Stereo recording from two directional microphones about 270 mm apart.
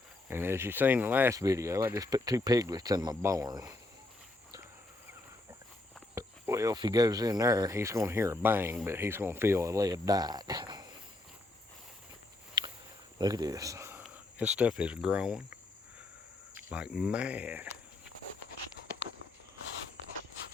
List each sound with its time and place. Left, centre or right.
0.3 s speech: centre
6.1 s speech: centre
12.6 s a sound: centre
13.1 s speech: centre
16.6 s speech: centre